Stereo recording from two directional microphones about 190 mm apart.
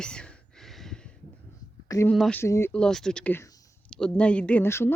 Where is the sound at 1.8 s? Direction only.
15° left (ahead or behind).